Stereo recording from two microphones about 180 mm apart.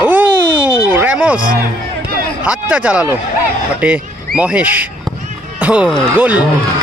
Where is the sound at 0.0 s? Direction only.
10° right (ahead or behind).